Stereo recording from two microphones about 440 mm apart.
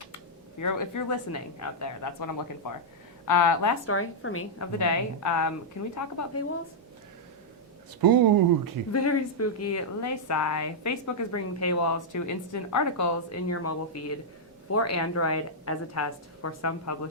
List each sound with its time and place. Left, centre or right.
0.6 s speech: left
3.8 s a woman's voice: left
8.0 s speech: right
8.9 s speech: left